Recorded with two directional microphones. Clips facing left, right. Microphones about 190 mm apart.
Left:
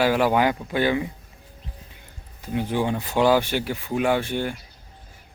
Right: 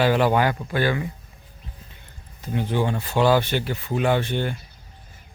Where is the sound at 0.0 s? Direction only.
10° left (ahead or behind).